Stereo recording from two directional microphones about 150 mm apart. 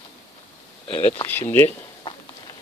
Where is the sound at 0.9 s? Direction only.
10° left (ahead or behind).